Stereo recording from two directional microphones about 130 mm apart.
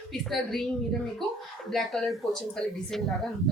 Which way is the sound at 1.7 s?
Centre (ahead or behind).